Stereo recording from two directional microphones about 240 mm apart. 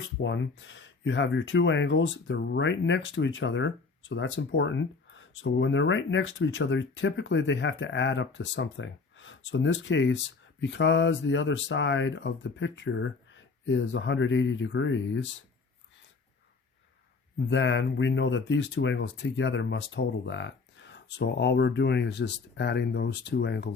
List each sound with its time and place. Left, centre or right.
0.2 s speech: left
17.5 s speech: left